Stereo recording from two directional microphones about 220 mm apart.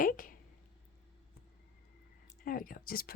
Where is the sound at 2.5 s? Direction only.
40° left (ahead or behind).